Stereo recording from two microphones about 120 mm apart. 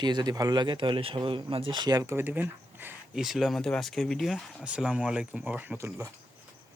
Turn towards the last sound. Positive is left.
turn(degrees=-25)  # may be behind; listen again after turning